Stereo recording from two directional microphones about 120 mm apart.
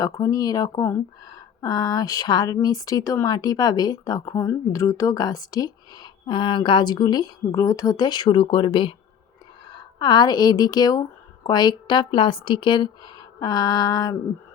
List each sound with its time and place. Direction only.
0.0 s a woman's voice: 30° left (ahead or behind)